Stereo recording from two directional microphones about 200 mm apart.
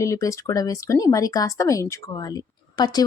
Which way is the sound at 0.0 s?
15° left (ahead or behind).